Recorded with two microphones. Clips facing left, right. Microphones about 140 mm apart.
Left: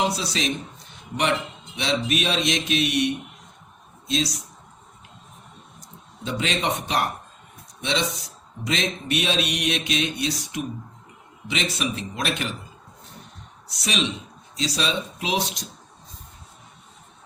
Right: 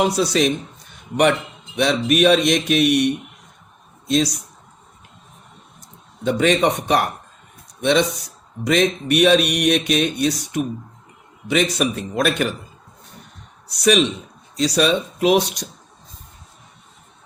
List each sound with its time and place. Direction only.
0.3 s a man's voice: 55° right (ahead or behind)
6.2 s speech: 50° right (ahead or behind)
13.8 s speech: 55° right (ahead or behind)